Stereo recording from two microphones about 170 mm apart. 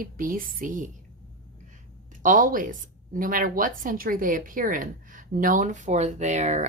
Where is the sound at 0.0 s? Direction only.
55° right (ahead or behind).